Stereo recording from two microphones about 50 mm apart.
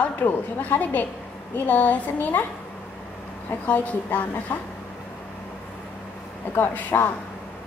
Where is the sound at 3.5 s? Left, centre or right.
Left.